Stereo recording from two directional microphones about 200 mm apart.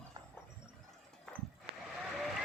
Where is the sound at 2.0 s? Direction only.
Centre (ahead or behind).